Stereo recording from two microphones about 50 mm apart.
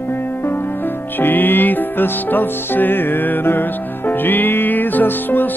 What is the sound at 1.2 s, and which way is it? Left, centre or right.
Music, left.